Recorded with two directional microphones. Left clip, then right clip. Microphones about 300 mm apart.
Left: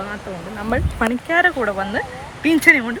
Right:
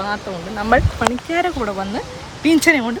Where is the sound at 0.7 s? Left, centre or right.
Right.